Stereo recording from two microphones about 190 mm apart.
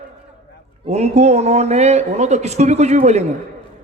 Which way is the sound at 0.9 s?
35° right (ahead or behind).